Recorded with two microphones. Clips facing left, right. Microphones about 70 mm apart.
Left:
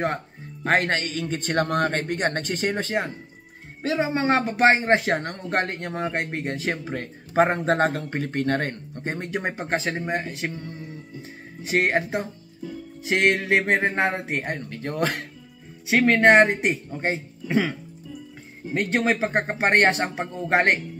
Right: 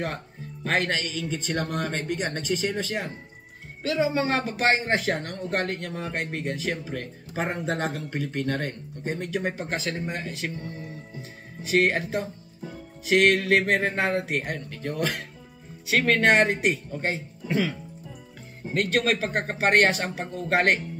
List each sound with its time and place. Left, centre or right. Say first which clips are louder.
0.7 s speech: left 4 dB; left
4.0 s speech: left 2 dB; left
4.8 s speech: left 5 dB; left
11.6 s speech: even; left
16.1 s speech: left 5 dB; left
18.7 s speech: left 1 dB; left